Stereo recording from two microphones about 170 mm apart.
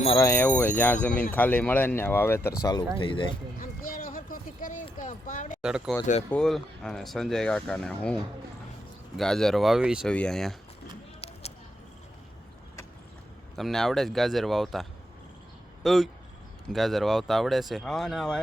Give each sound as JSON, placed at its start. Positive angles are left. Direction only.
{"t": 0.2, "sound": "speech", "side_deg": 15}
{"t": 3.6, "sound": "a sound", "side_deg": 55}
{"t": 5.6, "sound": "speech", "side_deg": -5}
{"t": 9.1, "sound": "speech", "side_deg": 5}
{"t": 13.6, "sound": "speech", "side_deg": 0}